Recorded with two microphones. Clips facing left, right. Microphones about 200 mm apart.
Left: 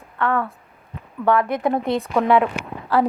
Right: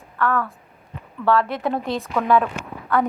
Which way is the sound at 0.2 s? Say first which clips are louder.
Left 1 dB; 20° left (ahead or behind).